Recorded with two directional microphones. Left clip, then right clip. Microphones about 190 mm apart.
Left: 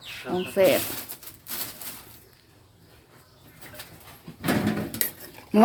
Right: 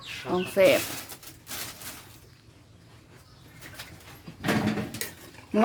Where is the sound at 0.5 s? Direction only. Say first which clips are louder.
Even; centre (ahead or behind).